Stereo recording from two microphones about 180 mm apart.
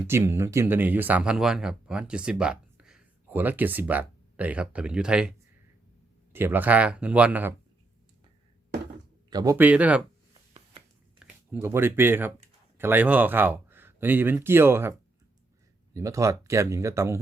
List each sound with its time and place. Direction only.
0.1 s speech: 15° right (ahead or behind)
6.3 s speech: 10° right (ahead or behind)
9.3 s speech: 20° right (ahead or behind)
11.2 s speech: 10° right (ahead or behind)
16.0 s speech: 15° right (ahead or behind)